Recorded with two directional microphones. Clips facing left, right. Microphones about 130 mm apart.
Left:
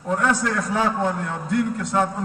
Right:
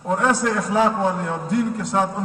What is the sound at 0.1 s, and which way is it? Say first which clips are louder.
A man's voice: right 2 dB; 20° right (ahead or behind).